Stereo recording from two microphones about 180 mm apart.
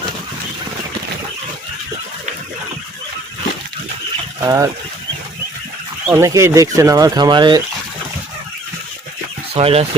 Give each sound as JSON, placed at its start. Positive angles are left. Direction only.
{"t": 4.4, "sound": "speech", "side_deg": -20}
{"t": 6.1, "sound": "speech", "side_deg": -15}
{"t": 9.6, "sound": "speech", "side_deg": -35}